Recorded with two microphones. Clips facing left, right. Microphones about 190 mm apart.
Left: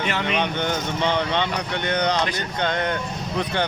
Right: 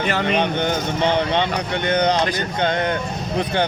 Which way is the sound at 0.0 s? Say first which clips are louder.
Right 4 dB; 40° right (ahead or behind).